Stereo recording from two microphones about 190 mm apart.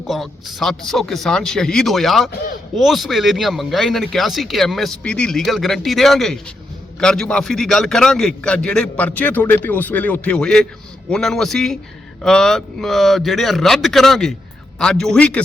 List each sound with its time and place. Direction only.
0.1 s speech: centre (ahead or behind)
2.3 s speech: 55° left (ahead or behind)
2.7 s speech: centre (ahead or behind)